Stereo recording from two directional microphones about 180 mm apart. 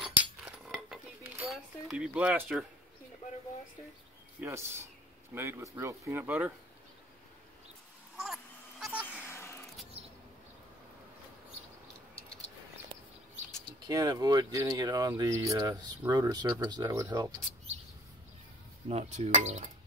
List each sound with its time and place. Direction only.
0.0 s cutlery: 5° right (ahead or behind)
1.5 s speech: 5° right (ahead or behind)
4.4 s speech: 15° right (ahead or behind)
8.2 s a sound: centre (ahead or behind)
9.0 s a sound: 10° left (ahead or behind)
13.8 s speech: 20° right (ahead or behind)
18.9 s speech: 40° right (ahead or behind)